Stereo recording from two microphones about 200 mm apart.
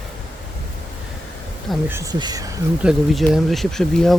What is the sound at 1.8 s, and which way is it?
Speech, 15° right (ahead or behind).